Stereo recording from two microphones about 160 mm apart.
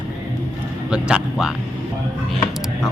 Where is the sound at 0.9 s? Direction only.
5° right (ahead or behind).